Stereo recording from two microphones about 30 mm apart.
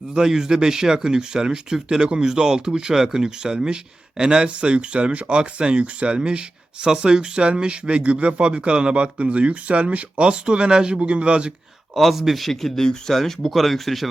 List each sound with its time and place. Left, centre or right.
0.1 s speech: right
4.4 s speech: right
12.1 s speech: centre
12.5 s speech: centre